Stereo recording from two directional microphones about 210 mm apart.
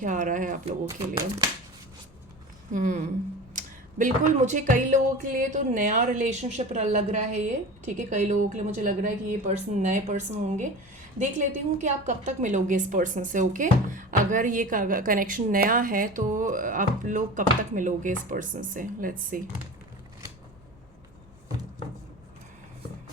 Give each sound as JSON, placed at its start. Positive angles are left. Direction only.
{"t": 0.0, "sound": "a woman's voice", "side_deg": -40}
{"t": 0.9, "sound": "speech", "side_deg": -15}
{"t": 2.7, "sound": "a woman's voice", "side_deg": -40}